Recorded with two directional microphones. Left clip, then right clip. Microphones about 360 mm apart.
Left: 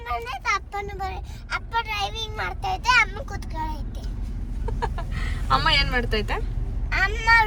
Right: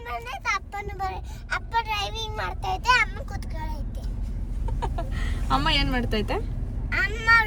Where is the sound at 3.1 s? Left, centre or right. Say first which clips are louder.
Left 5 dB; centre.